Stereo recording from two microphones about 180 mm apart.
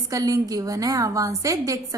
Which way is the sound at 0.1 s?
20° right (ahead or behind).